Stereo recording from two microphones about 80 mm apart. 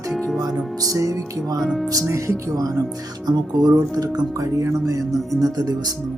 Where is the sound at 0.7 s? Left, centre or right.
Right.